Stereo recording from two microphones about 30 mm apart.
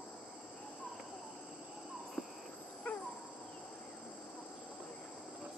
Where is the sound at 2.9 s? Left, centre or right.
Left.